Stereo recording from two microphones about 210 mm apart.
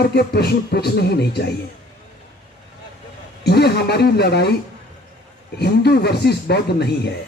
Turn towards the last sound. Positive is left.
turn(degrees=50)  # may be behind; listen again after turning